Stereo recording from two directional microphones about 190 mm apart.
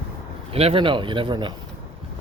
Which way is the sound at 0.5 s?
30° right (ahead or behind).